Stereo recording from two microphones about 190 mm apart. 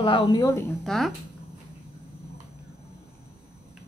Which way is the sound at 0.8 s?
Centre (ahead or behind).